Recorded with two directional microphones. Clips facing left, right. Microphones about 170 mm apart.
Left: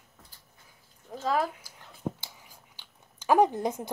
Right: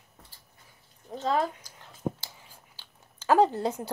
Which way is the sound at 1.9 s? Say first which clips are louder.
Right 2 dB; 15° left (ahead or behind).